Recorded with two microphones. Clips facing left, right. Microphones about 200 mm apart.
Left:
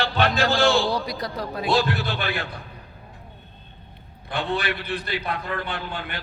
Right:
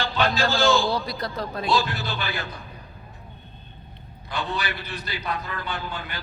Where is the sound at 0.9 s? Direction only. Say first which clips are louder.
Left 1 dB; 15° left (ahead or behind).